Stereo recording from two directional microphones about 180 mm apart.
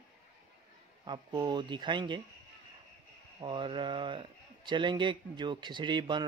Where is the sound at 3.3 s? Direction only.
25° right (ahead or behind).